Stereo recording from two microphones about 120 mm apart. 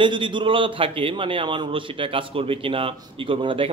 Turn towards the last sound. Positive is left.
turn(degrees=-45)  # may be behind; listen again after turning